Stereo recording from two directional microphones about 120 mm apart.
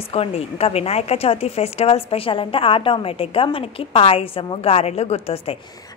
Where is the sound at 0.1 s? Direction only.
55° left (ahead or behind).